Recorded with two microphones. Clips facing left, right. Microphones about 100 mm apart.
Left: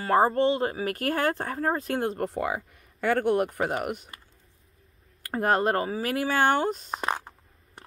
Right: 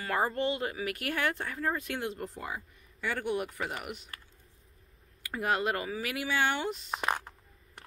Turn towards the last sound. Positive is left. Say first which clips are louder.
# left 2 dB
turn(degrees=20)  # may be behind; listen again after turning